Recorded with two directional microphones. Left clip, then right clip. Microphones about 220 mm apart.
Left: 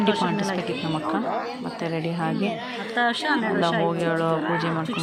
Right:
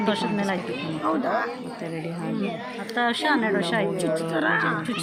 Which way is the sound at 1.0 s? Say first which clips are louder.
Right 5 dB; 50° right (ahead or behind).